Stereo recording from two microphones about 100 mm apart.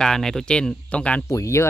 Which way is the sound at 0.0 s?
5° left (ahead or behind).